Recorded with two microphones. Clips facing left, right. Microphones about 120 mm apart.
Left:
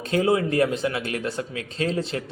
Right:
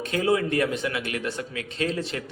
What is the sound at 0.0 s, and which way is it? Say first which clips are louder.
Speech: left 2 dB; 30° left (ahead or behind).